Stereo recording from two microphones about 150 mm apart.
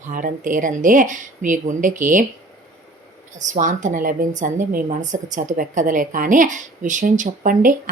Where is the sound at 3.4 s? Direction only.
55° right (ahead or behind).